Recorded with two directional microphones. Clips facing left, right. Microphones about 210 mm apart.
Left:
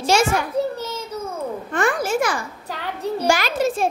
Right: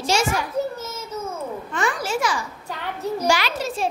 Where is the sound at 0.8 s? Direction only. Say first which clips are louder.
Left 4 dB; 30° left (ahead or behind).